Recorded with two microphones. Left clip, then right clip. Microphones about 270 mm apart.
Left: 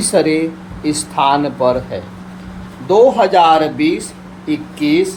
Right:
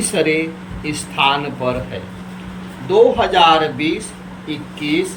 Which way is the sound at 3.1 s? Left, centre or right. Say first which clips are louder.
Left 2 dB; centre.